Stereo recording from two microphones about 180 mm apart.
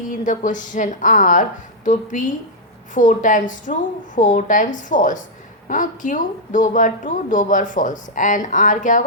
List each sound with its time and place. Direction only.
0.1 s speech: 45° left (ahead or behind)